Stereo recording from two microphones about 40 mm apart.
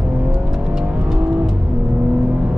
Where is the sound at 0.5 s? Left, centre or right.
Centre.